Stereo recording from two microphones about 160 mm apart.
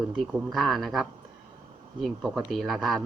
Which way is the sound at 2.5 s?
Centre (ahead or behind).